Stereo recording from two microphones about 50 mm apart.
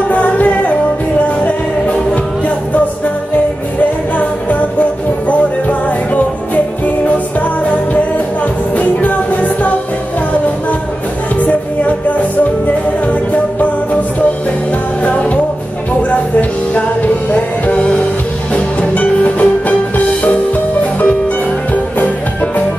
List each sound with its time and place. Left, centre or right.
0.1 s music: left
4.2 s music: left
8.7 s music: left
11.4 s music: left
16.1 s music: left
21.9 s music: left